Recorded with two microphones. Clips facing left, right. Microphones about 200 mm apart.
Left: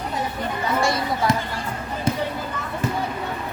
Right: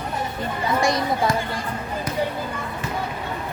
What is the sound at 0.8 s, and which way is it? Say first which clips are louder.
Speech: right 2 dB; 15° right (ahead or behind).